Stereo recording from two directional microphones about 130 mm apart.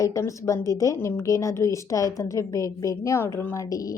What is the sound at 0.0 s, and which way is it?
A woman's voice, 25° left (ahead or behind).